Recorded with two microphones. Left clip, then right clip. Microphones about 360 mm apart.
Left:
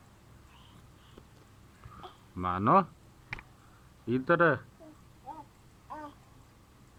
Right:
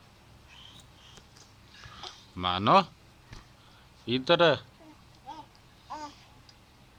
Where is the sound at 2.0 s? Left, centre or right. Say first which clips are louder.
Right 3 dB; centre.